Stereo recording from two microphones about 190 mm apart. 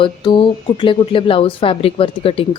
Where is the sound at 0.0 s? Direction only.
25° left (ahead or behind).